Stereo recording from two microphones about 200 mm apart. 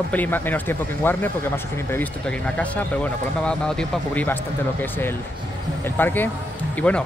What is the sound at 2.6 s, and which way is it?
Speech, 5° left (ahead or behind).